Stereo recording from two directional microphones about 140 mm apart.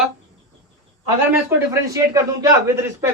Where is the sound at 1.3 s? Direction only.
20° right (ahead or behind).